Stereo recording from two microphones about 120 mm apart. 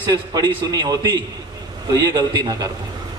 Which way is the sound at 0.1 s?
30° right (ahead or behind).